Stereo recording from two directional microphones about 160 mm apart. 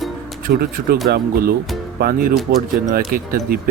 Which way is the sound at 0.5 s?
85° right.